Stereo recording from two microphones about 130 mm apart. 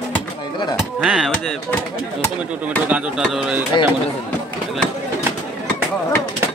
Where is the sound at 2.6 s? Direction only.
10° right (ahead or behind).